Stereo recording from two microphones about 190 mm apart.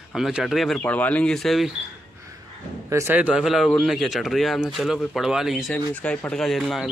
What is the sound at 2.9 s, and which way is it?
A man's voice, 10° right (ahead or behind).